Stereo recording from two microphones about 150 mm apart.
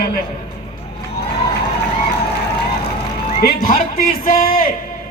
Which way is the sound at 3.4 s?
75° left (ahead or behind).